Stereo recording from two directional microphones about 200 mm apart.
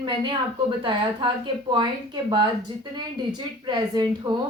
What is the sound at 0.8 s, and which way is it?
Speech, 25° right (ahead or behind).